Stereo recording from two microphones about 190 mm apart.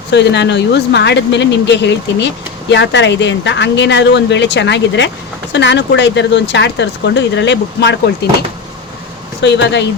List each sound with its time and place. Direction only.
0.1 s speech: 65° left (ahead or behind)